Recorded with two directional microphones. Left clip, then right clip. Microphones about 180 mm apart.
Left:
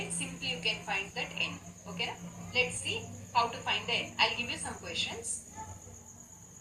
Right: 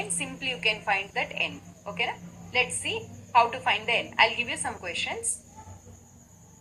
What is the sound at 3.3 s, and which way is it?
A woman's voice, 40° right (ahead or behind).